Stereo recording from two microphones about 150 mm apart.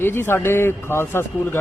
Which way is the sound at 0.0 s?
15° left (ahead or behind).